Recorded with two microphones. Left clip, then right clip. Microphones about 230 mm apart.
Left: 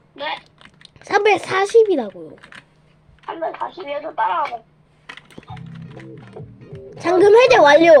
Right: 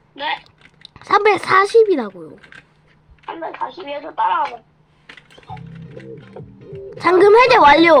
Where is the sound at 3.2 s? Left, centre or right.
Centre.